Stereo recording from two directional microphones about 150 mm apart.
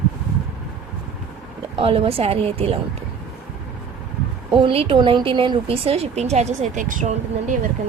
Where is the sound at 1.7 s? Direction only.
40° right (ahead or behind).